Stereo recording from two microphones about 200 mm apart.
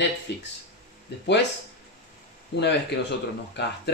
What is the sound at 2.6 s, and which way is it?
Speech, 60° left (ahead or behind).